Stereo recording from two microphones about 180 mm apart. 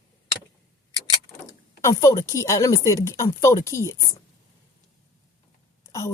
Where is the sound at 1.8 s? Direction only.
15° left (ahead or behind).